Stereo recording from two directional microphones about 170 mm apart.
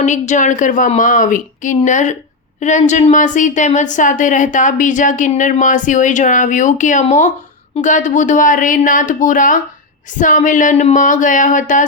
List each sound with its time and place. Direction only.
0.0 s a woman's voice: 45° left (ahead or behind)